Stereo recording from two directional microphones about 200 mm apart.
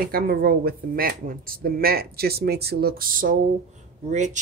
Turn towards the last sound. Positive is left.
turn(degrees=-35)  # may be behind; listen again after turning